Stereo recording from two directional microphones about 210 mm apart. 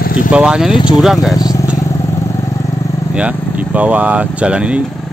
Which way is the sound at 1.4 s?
15° left (ahead or behind).